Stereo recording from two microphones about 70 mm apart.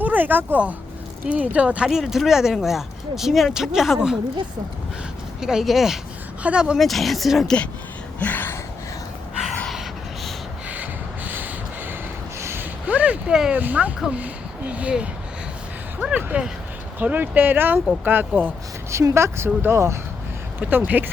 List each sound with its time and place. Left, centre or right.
0.0 s speech: right
1.9 s speech: centre
5.4 s speech: centre
6.7 s speech: centre
8.2 s gasp: left
10.7 s a sound: right
12.4 s a sound: right
12.9 s a sound: right
13.5 s speech: right
18.9 s speech: right
20.6 s speech: right